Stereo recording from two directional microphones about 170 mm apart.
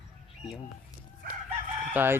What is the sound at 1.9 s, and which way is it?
Chicken, 10° right (ahead or behind).